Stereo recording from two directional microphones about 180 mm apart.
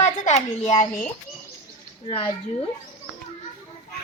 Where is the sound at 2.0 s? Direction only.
30° left (ahead or behind).